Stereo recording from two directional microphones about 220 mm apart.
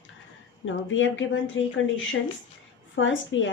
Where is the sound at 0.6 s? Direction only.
60° left (ahead or behind).